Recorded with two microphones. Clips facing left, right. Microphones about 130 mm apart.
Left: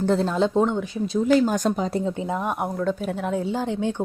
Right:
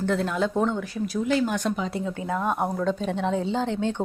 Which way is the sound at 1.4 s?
40° left (ahead or behind).